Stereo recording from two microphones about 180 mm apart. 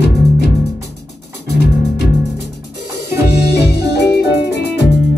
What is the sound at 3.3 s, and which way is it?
Music, 65° left (ahead or behind).